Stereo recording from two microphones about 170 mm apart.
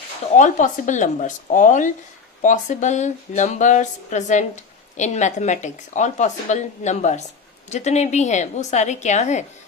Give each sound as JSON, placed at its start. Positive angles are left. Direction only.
{"t": 0.3, "sound": "speech", "side_deg": 45}